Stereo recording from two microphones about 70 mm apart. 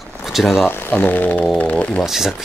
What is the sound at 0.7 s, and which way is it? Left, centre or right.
Speech, left.